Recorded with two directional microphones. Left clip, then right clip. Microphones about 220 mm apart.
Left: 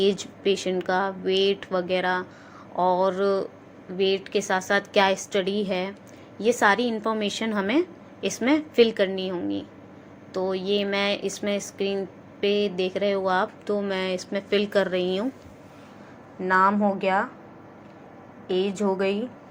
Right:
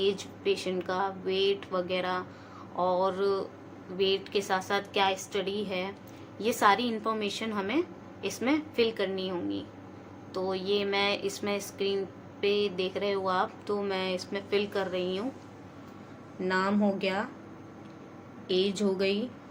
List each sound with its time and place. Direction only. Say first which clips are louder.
0.0 s a woman's voice: left 6 dB; 20° left (ahead or behind)
16.5 s a woman's voice: left 8 dB; centre (ahead or behind)
18.5 s a woman's voice: left 3 dB; centre (ahead or behind)